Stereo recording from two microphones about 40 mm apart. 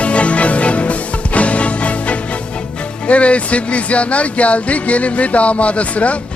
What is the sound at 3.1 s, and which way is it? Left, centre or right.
Speech, left.